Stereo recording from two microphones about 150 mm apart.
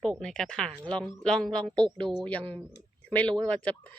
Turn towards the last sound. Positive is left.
turn(degrees=10)  # may be behind; listen again after turning